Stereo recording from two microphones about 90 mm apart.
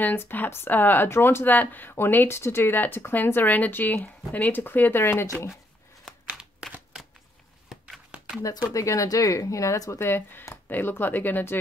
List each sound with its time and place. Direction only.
0.0 s speech: 20° left (ahead or behind)
8.1 s a sound: 15° right (ahead or behind)
8.7 s speech: 40° left (ahead or behind); by 11.5 s 20° left (ahead or behind)